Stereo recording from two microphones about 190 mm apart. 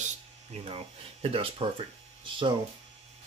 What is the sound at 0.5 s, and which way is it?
Speech, 30° right (ahead or behind).